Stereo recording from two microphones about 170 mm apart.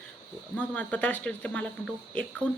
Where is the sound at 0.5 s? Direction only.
10° left (ahead or behind).